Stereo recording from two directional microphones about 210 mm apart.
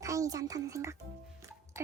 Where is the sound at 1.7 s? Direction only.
15° right (ahead or behind).